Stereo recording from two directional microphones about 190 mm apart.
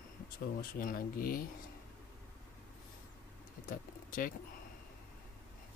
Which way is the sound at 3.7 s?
50° left (ahead or behind).